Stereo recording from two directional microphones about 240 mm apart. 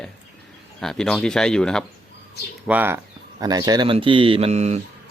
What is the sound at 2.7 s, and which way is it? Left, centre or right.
Speech, centre.